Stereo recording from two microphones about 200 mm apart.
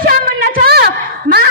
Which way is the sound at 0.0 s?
45° right (ahead or behind).